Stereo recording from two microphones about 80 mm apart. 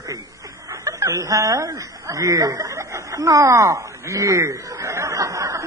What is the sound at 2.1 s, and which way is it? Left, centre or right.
Snicker, right.